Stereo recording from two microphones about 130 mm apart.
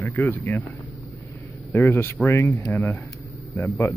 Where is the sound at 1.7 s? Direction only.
15° left (ahead or behind).